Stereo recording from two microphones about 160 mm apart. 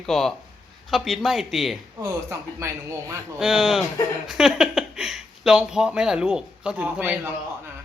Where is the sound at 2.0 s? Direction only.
20° right (ahead or behind).